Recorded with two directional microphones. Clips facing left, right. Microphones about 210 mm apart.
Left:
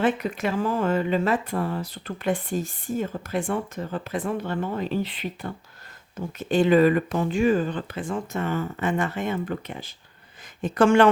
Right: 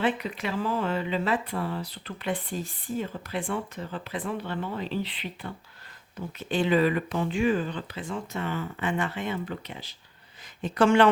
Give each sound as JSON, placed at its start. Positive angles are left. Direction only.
{"t": 0.0, "sound": "speech", "side_deg": 45}